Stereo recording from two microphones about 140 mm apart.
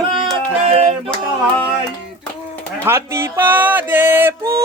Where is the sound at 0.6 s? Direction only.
50° right (ahead or behind).